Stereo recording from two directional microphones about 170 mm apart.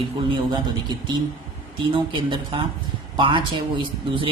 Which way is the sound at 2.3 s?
30° right (ahead or behind).